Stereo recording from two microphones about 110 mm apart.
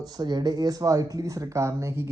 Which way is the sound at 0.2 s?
40° right (ahead or behind).